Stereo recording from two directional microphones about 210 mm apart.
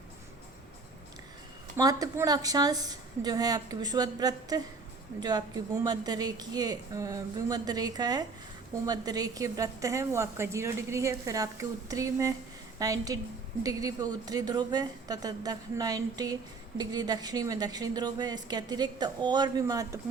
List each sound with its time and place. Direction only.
1.7 s a woman's voice: 15° right (ahead or behind)